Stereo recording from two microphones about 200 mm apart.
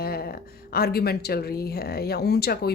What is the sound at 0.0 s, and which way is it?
Speech, 50° left (ahead or behind).